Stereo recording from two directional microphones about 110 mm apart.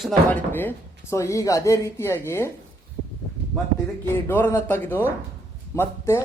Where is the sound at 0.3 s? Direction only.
20° left (ahead or behind).